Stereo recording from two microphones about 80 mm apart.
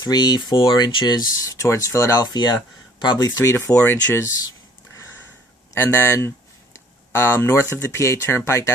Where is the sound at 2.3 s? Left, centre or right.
Left.